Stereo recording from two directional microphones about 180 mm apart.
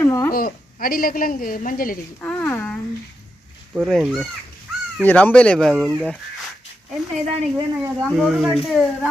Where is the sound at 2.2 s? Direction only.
10° left (ahead or behind).